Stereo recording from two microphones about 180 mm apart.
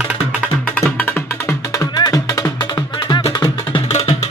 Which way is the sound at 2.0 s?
20° left (ahead or behind).